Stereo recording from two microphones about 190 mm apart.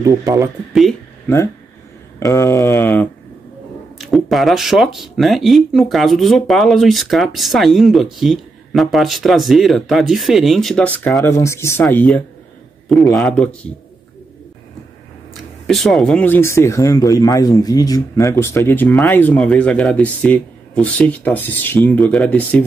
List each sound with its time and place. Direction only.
0.0 s speech: 15° right (ahead or behind)
1.2 s speech: 15° left (ahead or behind)
4.0 s speech: centre (ahead or behind)
15.6 s speech: centre (ahead or behind)